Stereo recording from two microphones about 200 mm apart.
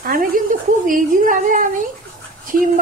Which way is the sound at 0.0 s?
45° right (ahead or behind).